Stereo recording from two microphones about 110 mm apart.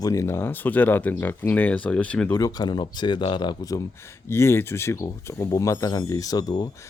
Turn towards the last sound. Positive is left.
turn(degrees=35)  # may be behind; listen again after turning